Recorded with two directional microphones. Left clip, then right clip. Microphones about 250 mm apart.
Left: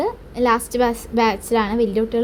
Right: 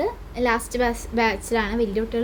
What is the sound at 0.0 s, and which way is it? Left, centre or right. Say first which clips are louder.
A woman's voice: left 4 dB; centre.